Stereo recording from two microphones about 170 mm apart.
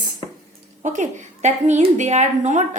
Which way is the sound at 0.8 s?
45° right (ahead or behind).